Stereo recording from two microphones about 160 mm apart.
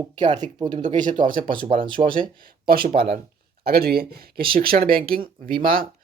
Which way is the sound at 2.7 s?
65° right (ahead or behind).